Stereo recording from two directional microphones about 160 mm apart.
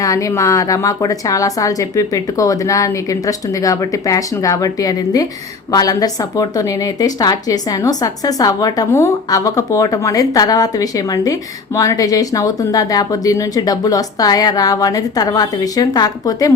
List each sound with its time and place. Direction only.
0.0 s a woman's voice: 20° left (ahead or behind)